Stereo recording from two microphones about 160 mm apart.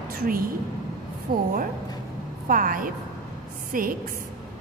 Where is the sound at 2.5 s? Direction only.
60° right (ahead or behind).